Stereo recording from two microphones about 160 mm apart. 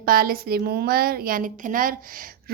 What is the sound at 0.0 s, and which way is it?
A woman's voice, 65° right (ahead or behind).